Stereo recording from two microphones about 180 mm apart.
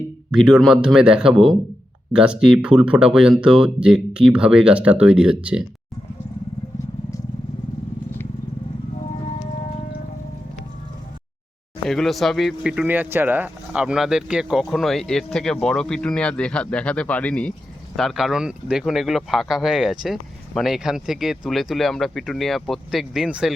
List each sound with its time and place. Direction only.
0.3 s speech: 5° right (ahead or behind)
11.9 s speech: centre (ahead or behind)